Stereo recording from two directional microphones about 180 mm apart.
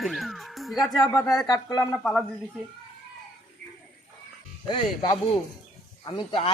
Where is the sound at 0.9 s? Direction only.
20° left (ahead or behind).